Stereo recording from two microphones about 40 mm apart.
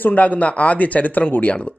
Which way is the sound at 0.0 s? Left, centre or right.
Left.